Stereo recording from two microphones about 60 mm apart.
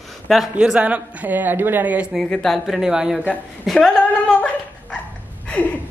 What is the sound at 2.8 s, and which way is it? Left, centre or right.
Speech, centre.